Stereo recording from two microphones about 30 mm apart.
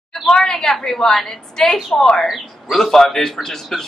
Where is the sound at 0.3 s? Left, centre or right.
Centre.